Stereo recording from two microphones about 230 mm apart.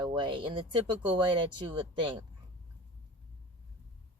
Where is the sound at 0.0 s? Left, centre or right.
Right.